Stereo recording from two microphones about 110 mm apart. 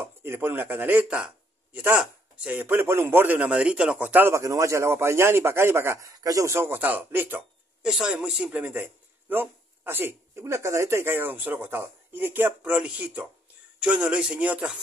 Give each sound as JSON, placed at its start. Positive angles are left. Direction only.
{"t": 0.0, "sound": "speech", "side_deg": -20}
{"t": 7.9, "sound": "speech", "side_deg": -5}